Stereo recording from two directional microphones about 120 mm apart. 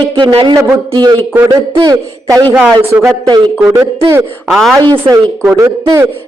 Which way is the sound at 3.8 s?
20° right (ahead or behind).